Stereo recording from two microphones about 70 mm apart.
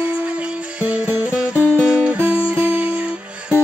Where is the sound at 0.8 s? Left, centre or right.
Centre.